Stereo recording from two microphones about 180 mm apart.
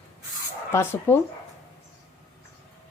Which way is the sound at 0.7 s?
15° left (ahead or behind).